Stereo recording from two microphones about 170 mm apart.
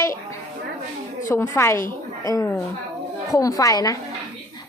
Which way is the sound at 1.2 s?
15° left (ahead or behind).